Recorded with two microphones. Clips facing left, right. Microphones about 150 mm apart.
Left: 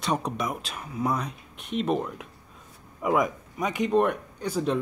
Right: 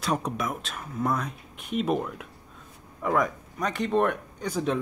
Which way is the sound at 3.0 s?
10° left (ahead or behind).